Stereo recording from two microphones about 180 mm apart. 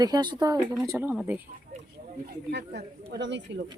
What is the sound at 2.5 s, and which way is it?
Speech, 70° right (ahead or behind).